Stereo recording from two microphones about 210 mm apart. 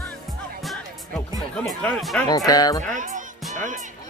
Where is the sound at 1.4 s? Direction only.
Centre (ahead or behind).